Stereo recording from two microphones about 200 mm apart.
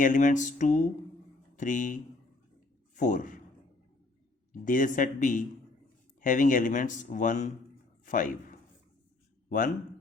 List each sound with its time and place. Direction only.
0.0 s a man's voice: 40° left (ahead or behind)
4.6 s a man's voice: 40° left (ahead or behind)